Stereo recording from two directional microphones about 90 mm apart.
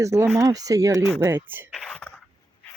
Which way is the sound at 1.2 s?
25° right (ahead or behind).